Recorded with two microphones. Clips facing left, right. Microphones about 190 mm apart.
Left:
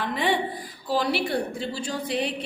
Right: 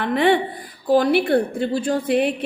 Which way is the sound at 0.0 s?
60° right (ahead or behind).